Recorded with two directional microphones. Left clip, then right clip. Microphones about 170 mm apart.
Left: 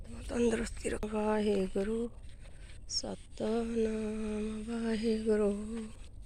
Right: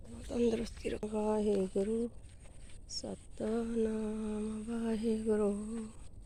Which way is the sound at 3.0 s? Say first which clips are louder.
Right 1 dB; centre (ahead or behind).